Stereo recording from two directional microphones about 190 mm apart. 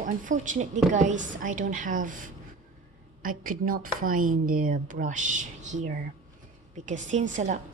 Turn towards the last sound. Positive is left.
turn(degrees=-40)  # may be behind; listen again after turning